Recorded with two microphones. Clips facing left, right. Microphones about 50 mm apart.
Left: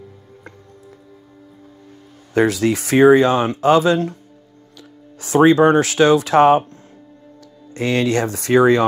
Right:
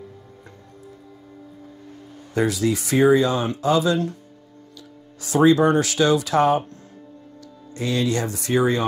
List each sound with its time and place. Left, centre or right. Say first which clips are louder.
2.3 s speech: left 5 dB; left